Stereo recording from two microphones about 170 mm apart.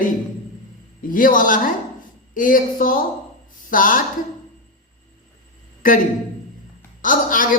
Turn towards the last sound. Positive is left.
turn(degrees=55)  # may be behind; listen again after turning